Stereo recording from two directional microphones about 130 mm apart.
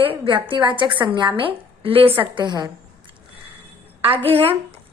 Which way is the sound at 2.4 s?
35° right (ahead or behind).